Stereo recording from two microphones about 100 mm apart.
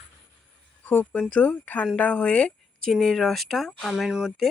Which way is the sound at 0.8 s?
20° left (ahead or behind).